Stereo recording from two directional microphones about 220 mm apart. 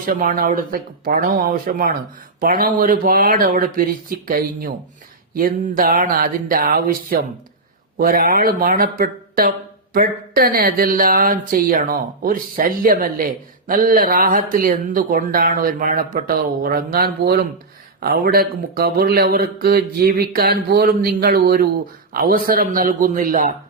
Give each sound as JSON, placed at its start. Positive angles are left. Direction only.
{"t": 0.0, "sound": "a man's voice", "side_deg": -40}